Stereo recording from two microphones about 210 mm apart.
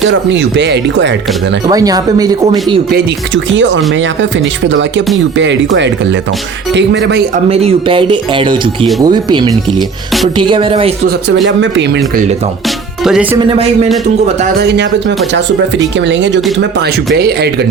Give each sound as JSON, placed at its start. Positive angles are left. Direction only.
{"t": 0.0, "sound": "speech", "side_deg": -60}
{"t": 1.6, "sound": "speech", "side_deg": -15}
{"t": 2.9, "sound": "speech", "side_deg": -60}
{"t": 7.5, "sound": "speech", "side_deg": -30}
{"t": 11.4, "sound": "speech", "side_deg": -60}
{"t": 13.3, "sound": "speech", "side_deg": -25}
{"t": 14.6, "sound": "speech", "side_deg": -55}